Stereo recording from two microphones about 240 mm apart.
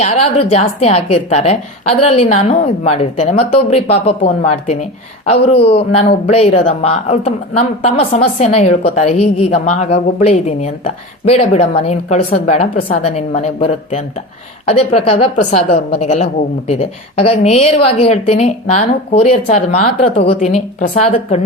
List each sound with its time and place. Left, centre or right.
0.0 s a woman's voice: left